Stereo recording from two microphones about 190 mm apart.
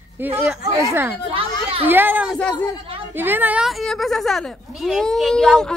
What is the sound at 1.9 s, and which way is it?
A woman's voice, 10° right (ahead or behind).